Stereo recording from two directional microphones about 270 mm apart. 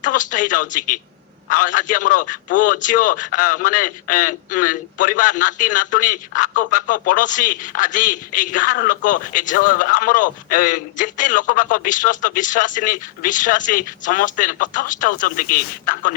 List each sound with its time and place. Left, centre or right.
0.0 s a man's voice: left